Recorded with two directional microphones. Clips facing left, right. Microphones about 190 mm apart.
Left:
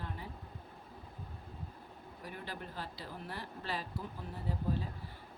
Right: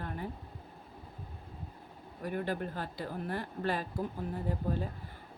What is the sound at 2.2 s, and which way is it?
Speech, 50° right (ahead or behind).